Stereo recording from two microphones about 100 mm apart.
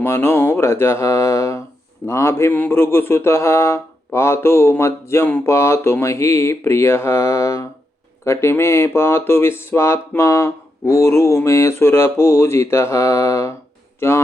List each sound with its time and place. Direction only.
0.0 s speech: 25° left (ahead or behind)